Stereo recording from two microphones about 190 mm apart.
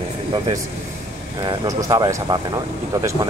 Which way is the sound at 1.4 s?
20° right (ahead or behind).